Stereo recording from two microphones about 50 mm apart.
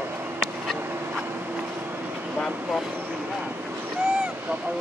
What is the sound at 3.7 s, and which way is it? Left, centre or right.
Boat, right.